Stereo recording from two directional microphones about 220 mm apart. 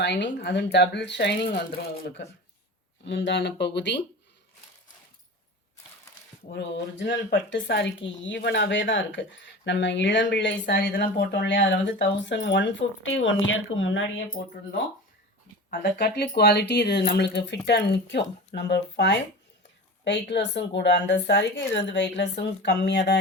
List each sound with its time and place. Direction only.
0.0 s a woman's voice: 50° left (ahead or behind)
6.5 s speech: 55° left (ahead or behind)
10.8 s speech: 45° left (ahead or behind)
15.8 s a woman's voice: 50° left (ahead or behind)